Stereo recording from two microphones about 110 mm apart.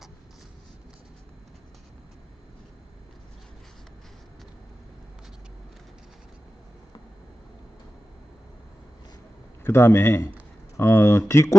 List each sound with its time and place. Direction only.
9.6 s a man's voice: 20° left (ahead or behind)